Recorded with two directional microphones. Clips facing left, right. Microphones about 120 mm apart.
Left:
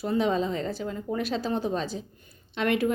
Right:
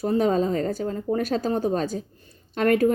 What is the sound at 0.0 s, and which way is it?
A woman's voice, 40° right (ahead or behind).